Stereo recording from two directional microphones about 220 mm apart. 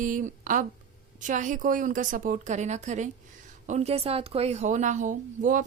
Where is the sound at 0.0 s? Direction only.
35° right (ahead or behind).